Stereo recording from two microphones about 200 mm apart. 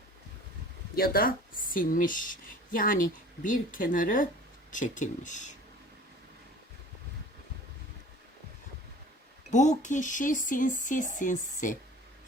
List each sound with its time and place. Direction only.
0.9 s speech: 50° left (ahead or behind)
9.5 s speech: 35° left (ahead or behind)